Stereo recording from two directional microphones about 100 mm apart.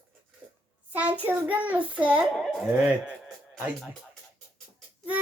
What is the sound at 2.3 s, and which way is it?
Speech, 5° right (ahead or behind).